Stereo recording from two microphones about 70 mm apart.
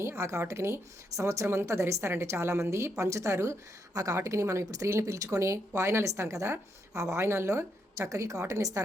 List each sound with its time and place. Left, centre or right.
0.0 s speech: right